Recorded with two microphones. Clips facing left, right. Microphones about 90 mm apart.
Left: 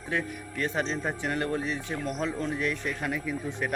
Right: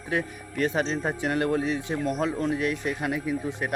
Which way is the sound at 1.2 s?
15° right (ahead or behind).